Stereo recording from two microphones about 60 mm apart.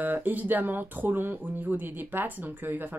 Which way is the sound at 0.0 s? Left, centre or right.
Right.